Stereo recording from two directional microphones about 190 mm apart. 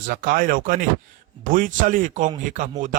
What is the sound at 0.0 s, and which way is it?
Speech, 50° right (ahead or behind).